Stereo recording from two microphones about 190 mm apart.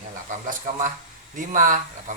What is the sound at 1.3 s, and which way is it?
Speech, 45° right (ahead or behind).